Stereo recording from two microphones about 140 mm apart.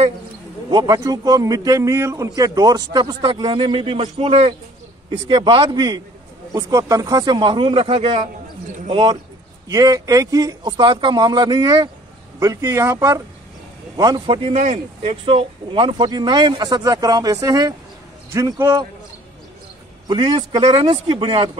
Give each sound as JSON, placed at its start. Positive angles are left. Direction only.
{"t": 0.7, "sound": "a man's voice", "side_deg": -30}
{"t": 14.5, "sound": "speech", "side_deg": -60}
{"t": 15.0, "sound": "a man's voice", "side_deg": -40}
{"t": 20.1, "sound": "speech", "side_deg": -35}